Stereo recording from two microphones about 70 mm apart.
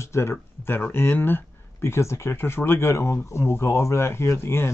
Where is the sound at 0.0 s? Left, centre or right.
Left.